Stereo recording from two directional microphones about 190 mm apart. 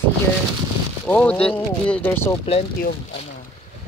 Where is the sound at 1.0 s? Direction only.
5° left (ahead or behind).